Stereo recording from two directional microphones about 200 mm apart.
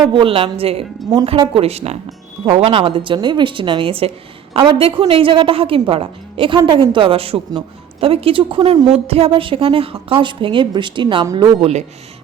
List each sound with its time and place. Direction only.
0.1 s a woman's voice: 25° right (ahead or behind)